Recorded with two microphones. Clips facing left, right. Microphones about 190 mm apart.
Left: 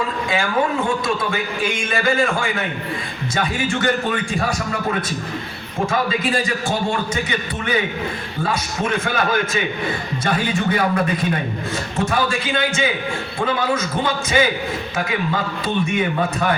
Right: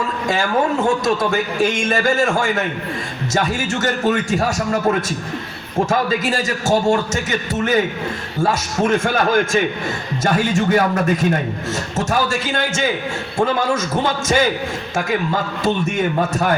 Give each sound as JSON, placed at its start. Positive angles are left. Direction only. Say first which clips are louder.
{"t": 0.3, "sound": "a man's voice", "louder": "right 3 dB", "side_deg": -45}
{"t": 15.6, "sound": "a man's voice", "louder": "right 2 dB", "side_deg": -45}